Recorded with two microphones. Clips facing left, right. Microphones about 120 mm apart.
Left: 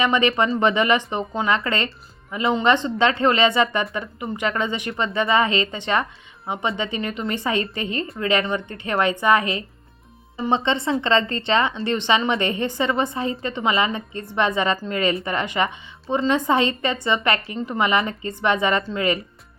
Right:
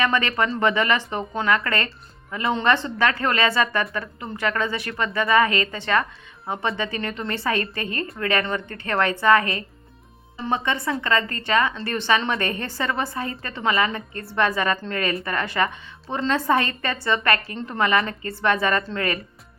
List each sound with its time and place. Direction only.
0.0 s a woman's voice: 20° left (ahead or behind)